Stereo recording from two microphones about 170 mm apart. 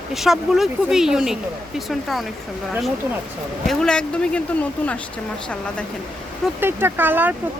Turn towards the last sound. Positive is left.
turn(degrees=-10)  # may be behind; listen again after turning